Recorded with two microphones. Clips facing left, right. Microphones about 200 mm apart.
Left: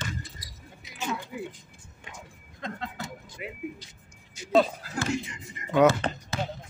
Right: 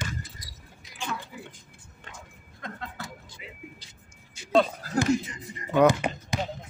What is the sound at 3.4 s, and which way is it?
Music, 60° left (ahead or behind).